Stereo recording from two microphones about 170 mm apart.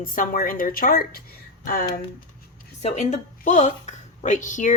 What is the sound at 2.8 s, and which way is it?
Speech, 40° left (ahead or behind).